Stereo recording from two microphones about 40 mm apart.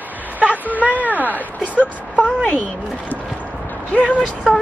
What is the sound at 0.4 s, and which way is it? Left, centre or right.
Speech, right.